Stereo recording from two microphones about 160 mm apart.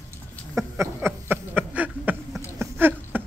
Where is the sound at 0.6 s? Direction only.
15° right (ahead or behind).